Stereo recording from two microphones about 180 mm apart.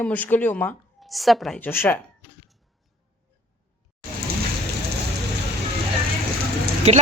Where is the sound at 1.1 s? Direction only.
Centre (ahead or behind).